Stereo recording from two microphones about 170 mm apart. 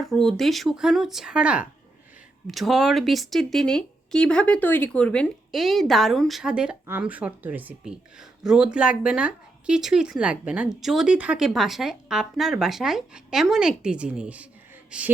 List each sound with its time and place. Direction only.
0.0 s speech: centre (ahead or behind)